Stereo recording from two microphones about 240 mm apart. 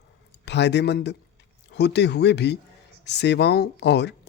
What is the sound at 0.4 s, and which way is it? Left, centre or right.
Speech, left.